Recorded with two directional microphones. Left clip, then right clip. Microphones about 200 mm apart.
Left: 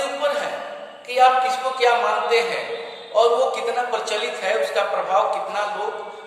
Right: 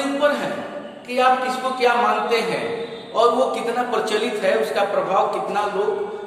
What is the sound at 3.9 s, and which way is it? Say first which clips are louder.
A man's voice: right 2 dB; centre (ahead or behind).